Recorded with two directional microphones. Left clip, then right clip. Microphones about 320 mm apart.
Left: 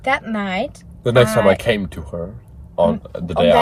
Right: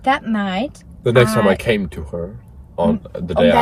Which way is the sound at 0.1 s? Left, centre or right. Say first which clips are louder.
Right 1 dB; centre.